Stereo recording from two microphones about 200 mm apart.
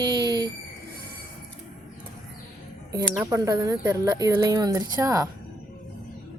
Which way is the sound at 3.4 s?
20° right (ahead or behind).